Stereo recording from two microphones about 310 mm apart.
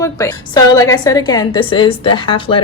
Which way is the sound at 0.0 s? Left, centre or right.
Centre.